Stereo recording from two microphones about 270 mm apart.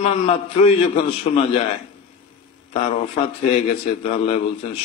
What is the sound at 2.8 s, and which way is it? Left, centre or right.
A man's voice, left.